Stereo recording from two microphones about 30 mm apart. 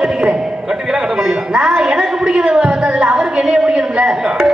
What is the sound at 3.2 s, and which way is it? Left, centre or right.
Speech, centre.